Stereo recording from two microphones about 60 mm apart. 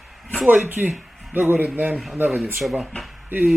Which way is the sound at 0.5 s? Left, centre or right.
Right.